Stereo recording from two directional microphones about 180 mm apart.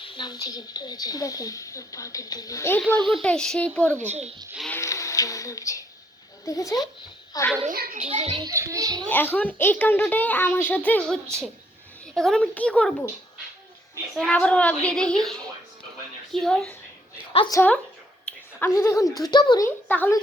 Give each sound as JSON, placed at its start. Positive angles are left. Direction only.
{"t": 0.0, "sound": "a woman's voice", "side_deg": 25}
{"t": 4.1, "sound": "a child's voice", "side_deg": -35}
{"t": 4.7, "sound": "a child's voice", "side_deg": 15}
{"t": 7.7, "sound": "a child's voice", "side_deg": -50}
{"t": 8.0, "sound": "a child's voice", "side_deg": -35}
{"t": 8.4, "sound": "a child's voice", "side_deg": -20}
{"t": 9.0, "sound": "a child's voice", "side_deg": 10}
{"t": 14.2, "sound": "a woman's voice", "side_deg": 5}
{"t": 17.3, "sound": "a woman's voice", "side_deg": 25}
{"t": 18.3, "sound": "a sound", "side_deg": 5}
{"t": 18.8, "sound": "a child's voice", "side_deg": 15}